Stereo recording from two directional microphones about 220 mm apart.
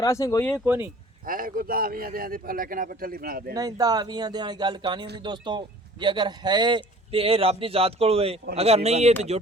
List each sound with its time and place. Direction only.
0.0 s speech: 15° left (ahead or behind)
0.5 s speech: 10° right (ahead or behind)
1.2 s a man's voice: 40° right (ahead or behind)
3.5 s a man's voice: 15° right (ahead or behind)